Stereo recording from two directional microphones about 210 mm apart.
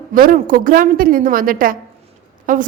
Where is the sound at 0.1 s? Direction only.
40° right (ahead or behind).